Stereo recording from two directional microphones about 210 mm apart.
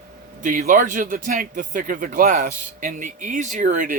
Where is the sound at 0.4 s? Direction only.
40° right (ahead or behind).